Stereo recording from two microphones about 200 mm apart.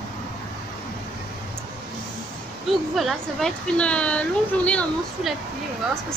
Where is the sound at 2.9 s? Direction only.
Centre (ahead or behind).